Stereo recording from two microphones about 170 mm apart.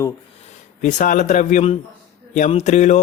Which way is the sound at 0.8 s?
45° left (ahead or behind).